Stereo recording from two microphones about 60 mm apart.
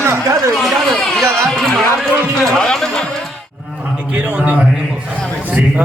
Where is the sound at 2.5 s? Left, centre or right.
Centre.